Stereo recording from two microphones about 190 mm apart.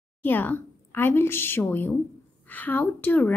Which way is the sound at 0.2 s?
10° left (ahead or behind).